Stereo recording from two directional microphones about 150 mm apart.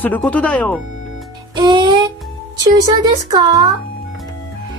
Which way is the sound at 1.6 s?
30° right (ahead or behind).